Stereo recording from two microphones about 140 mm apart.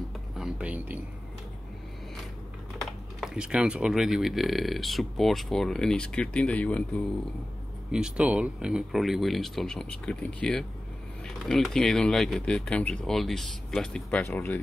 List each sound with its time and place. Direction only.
0.4 s speech: 5° right (ahead or behind)
2.8 s speech: centre (ahead or behind)
7.9 s speech: 5° right (ahead or behind)
14.2 s speech: 15° left (ahead or behind)